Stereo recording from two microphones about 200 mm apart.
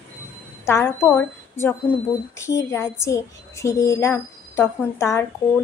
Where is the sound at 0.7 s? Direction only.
15° left (ahead or behind).